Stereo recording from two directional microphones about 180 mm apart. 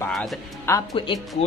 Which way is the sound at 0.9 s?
25° left (ahead or behind).